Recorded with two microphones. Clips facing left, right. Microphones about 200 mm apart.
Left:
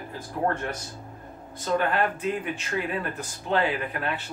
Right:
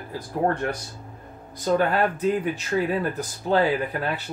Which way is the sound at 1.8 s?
40° right (ahead or behind).